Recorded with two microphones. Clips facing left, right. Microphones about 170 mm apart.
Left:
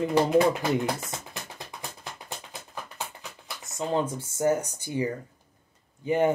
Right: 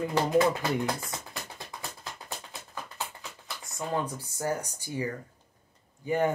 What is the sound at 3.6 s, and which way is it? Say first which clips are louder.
Speech: left 4 dB; 20° left (ahead or behind).